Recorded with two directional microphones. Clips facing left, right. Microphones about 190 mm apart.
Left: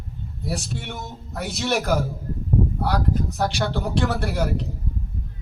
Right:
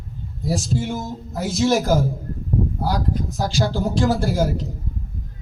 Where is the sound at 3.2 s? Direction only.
65° left (ahead or behind).